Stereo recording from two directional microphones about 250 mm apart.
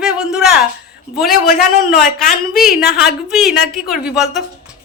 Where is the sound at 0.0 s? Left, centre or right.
Centre.